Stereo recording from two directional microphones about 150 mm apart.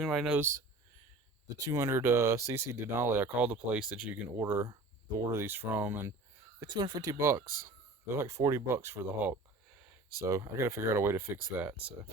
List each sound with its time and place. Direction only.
0.0 s speech: centre (ahead or behind)
0.3 s speech: 15° right (ahead or behind)
1.6 s speech: 20° right (ahead or behind)
6.6 s speech: 30° right (ahead or behind); by 11.9 s 10° right (ahead or behind)